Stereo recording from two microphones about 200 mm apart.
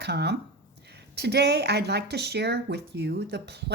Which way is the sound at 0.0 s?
55° right (ahead or behind).